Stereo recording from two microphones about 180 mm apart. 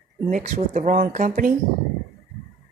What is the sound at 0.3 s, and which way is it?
Speech, 45° right (ahead or behind).